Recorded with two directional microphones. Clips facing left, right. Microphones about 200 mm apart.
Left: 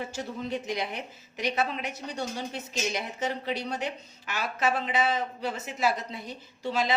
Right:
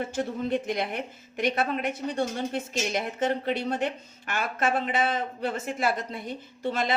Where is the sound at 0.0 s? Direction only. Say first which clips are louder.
Right 5 dB; 55° right (ahead or behind).